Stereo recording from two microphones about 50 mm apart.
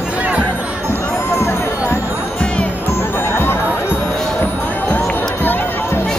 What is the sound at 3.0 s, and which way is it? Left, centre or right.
Music, left.